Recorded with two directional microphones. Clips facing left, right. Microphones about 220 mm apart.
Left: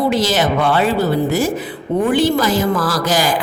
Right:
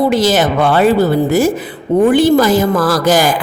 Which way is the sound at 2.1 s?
50° right (ahead or behind).